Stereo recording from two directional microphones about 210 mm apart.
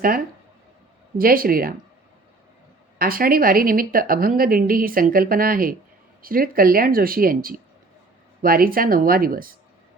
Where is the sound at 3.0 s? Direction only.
45° right (ahead or behind).